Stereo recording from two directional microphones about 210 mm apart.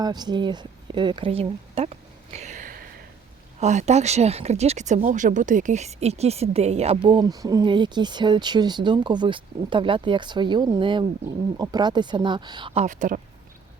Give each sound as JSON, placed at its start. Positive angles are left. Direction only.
{"t": 0.0, "sound": "speech", "side_deg": -20}